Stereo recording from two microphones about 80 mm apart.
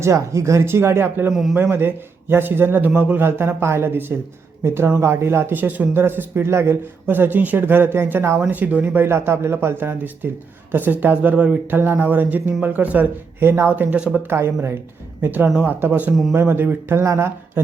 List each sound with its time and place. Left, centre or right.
0.0 s speech: right
1.3 s a man's voice: centre
1.7 s a man's voice: right
14.3 s a man's voice: right